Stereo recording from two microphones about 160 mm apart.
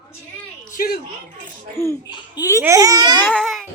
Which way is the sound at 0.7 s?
65° left (ahead or behind).